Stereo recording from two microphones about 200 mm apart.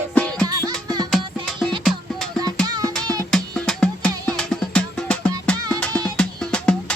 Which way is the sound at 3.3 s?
Centre (ahead or behind).